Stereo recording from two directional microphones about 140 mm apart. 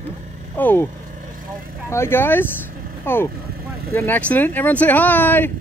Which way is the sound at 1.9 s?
20° left (ahead or behind).